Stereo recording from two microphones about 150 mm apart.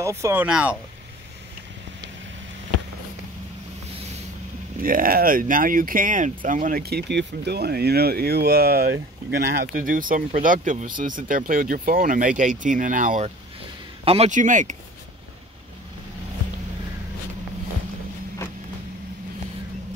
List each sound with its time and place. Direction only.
0.0 s speech: 20° right (ahead or behind)
4.8 s speech: 70° right (ahead or behind)
14.0 s a man's voice: 40° right (ahead or behind)
14.3 s speech: 55° right (ahead or behind)